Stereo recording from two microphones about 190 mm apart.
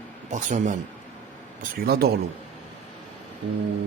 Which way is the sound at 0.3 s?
40° right (ahead or behind).